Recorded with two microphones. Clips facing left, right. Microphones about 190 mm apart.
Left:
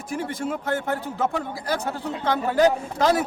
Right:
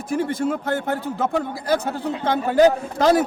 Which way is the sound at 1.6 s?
25° right (ahead or behind).